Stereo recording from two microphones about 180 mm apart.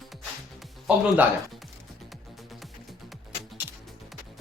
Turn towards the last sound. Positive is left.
turn(degrees=0)  # may be behind; listen again after turning